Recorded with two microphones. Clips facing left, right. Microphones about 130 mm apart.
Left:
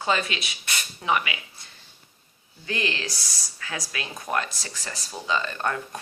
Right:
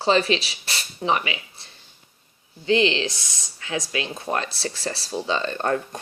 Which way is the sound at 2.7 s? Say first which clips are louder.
Right 10 dB; 25° right (ahead or behind).